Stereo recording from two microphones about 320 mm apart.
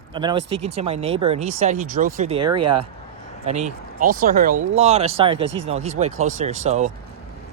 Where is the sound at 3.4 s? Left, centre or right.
Right.